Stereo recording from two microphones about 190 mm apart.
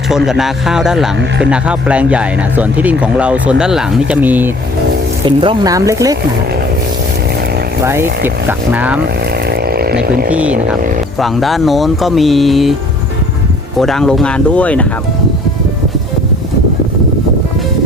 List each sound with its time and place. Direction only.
0.3 s speech: centre (ahead or behind)
5.2 s speech: 25° right (ahead or behind)
7.9 s speech: 10° right (ahead or behind)
9.5 s a sound: 55° right (ahead or behind)
10.3 s speech: 5° right (ahead or behind)
13.7 s speech: centre (ahead or behind)